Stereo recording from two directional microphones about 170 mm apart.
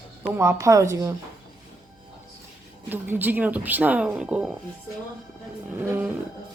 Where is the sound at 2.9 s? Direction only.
10° right (ahead or behind).